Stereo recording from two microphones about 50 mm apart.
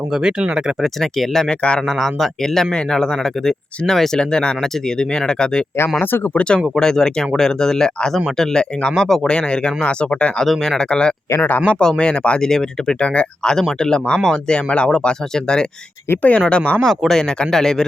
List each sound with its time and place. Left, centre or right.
0.1 s speech: centre
0.8 s speech: centre
1.5 s speech: centre
2.0 s speech: centre
9.3 s speech: centre
10.4 s speech: centre
10.8 s speech: centre
11.3 s speech: left
11.8 s speech: centre
12.4 s speech: centre
16.8 s speech: centre
17.1 s speech: centre